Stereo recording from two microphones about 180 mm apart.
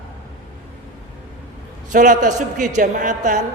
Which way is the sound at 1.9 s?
45° right (ahead or behind).